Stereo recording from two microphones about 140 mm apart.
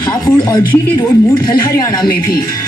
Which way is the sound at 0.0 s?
30° left (ahead or behind).